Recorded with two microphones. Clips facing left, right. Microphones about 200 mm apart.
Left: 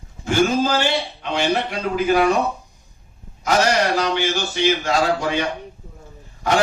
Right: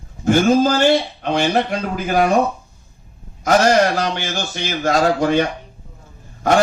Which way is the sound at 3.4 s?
50° right (ahead or behind).